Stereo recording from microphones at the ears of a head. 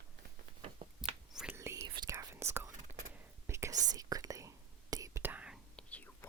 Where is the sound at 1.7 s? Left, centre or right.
Right.